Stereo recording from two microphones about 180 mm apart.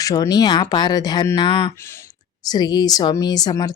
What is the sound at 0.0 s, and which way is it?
Speech, 20° left (ahead or behind).